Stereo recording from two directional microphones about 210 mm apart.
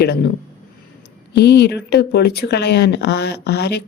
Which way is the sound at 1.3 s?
50° left (ahead or behind).